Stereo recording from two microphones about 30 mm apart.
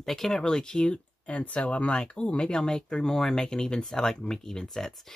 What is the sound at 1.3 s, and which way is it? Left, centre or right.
Speech, left.